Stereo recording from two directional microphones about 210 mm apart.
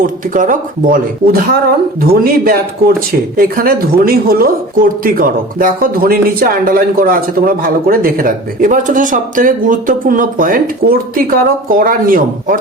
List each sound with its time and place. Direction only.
0.0 s speech: 40° right (ahead or behind)